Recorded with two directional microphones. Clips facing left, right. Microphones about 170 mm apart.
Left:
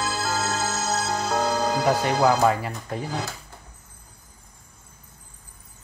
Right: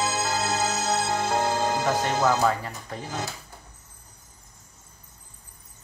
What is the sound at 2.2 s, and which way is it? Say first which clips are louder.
Speech: left 3 dB; 15° left (ahead or behind).